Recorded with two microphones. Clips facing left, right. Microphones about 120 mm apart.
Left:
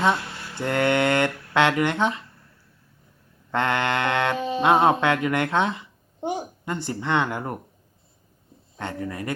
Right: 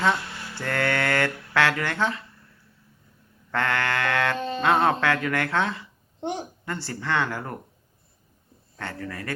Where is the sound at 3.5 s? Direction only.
20° left (ahead or behind).